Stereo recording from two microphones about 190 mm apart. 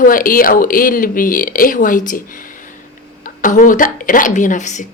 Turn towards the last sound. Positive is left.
turn(degrees=40)  # may be behind; listen again after turning